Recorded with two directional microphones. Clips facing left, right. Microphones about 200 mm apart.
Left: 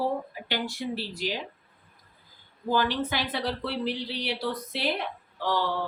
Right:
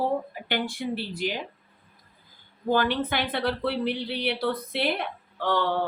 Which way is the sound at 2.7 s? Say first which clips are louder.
Right 2 dB; 55° right (ahead or behind).